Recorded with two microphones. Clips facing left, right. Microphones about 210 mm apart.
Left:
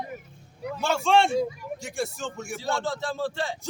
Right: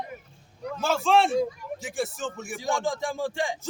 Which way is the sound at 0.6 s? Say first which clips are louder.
Even; 5° left (ahead or behind).